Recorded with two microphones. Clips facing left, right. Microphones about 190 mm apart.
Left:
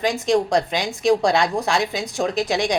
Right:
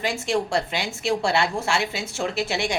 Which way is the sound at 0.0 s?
15° left (ahead or behind).